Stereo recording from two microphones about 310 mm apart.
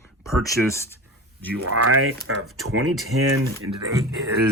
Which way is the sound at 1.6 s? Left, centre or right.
Right.